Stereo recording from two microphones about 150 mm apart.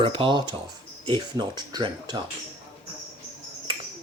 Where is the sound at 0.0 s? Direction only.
35° right (ahead or behind).